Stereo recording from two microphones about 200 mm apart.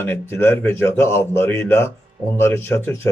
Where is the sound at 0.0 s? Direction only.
10° left (ahead or behind).